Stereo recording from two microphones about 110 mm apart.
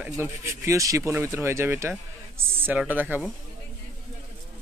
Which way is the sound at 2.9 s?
15° right (ahead or behind).